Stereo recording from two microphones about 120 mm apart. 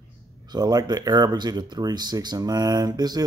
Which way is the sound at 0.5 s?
35° right (ahead or behind).